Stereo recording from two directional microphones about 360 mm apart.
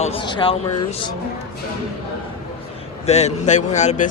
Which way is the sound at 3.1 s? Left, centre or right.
Centre.